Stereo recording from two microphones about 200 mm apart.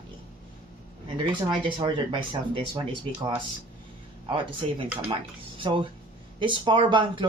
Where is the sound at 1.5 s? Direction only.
30° right (ahead or behind).